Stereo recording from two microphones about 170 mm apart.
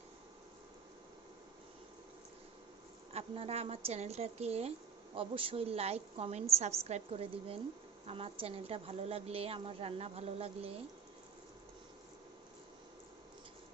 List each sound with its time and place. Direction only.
3.1 s a woman's voice: 35° right (ahead or behind)